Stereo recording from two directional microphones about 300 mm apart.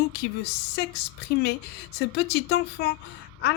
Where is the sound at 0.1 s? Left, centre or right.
Left.